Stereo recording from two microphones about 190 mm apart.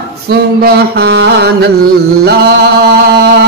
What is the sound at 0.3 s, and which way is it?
Music, 55° right (ahead or behind).